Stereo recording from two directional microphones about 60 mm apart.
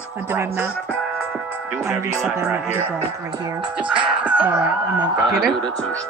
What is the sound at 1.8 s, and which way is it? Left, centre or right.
Speech, right.